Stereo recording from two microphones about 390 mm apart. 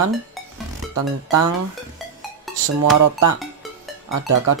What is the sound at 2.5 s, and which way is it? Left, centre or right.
Dishes, centre.